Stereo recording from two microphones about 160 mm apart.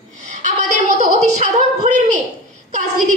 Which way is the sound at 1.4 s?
50° right (ahead or behind).